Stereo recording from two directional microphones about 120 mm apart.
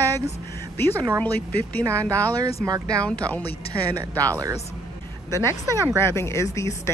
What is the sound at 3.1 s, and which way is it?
Speech, 10° left (ahead or behind).